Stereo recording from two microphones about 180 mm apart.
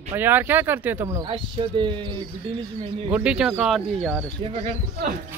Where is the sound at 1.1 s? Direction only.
25° right (ahead or behind).